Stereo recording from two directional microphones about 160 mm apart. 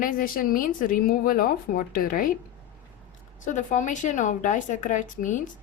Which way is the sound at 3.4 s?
50° left (ahead or behind).